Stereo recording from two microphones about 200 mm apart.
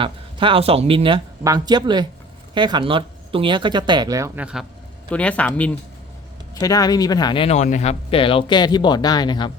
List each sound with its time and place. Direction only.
0.0 s speech: 25° right (ahead or behind)
5.1 s speech: 5° left (ahead or behind)
6.5 s speech: 20° left (ahead or behind)